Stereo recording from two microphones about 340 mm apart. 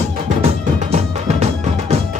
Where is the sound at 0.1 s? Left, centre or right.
Centre.